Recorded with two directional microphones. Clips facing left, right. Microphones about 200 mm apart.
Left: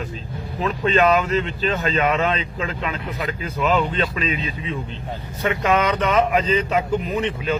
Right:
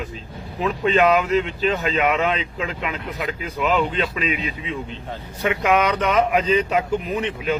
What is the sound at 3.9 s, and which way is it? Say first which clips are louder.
Speech: even; 15° right (ahead or behind).